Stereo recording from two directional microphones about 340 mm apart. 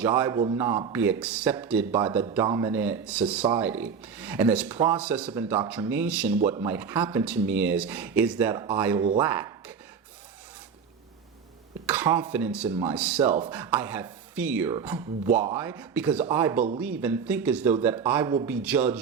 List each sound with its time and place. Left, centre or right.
0.0 s speech: centre
9.2 s a sound: centre
11.9 s speech: centre